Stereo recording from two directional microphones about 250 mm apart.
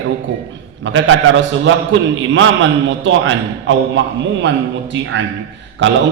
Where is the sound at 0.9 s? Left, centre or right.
Right.